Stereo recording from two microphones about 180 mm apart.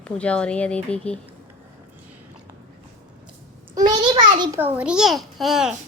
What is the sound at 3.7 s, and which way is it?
Speech, 25° right (ahead or behind).